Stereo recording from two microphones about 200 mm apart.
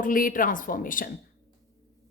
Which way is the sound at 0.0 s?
45° left (ahead or behind).